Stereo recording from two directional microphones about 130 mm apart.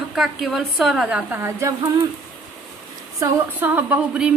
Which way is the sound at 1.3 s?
20° right (ahead or behind).